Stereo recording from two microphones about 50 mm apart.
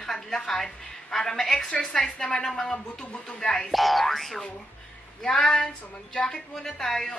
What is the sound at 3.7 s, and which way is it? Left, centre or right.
A woman's voice, centre.